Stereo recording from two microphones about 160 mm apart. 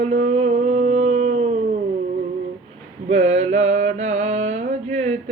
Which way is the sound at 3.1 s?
45° right (ahead or behind).